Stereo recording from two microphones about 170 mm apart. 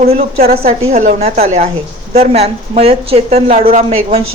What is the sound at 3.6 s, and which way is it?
Speech, 55° right (ahead or behind).